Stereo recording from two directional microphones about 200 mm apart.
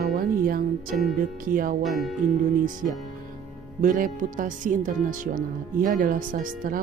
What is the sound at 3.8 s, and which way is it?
Speech, 40° right (ahead or behind).